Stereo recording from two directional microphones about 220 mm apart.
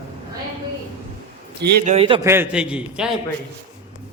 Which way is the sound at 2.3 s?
5° right (ahead or behind).